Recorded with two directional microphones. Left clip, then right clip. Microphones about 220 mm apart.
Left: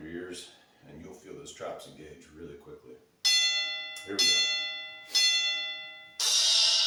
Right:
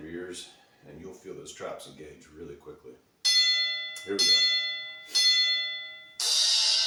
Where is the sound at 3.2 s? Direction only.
45° left (ahead or behind).